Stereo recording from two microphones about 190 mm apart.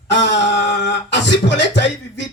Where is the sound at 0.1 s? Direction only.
70° left (ahead or behind).